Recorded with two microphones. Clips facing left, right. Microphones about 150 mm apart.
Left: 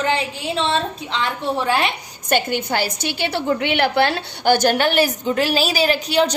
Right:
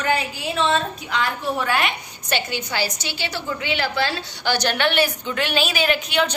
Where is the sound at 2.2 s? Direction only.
50° left (ahead or behind).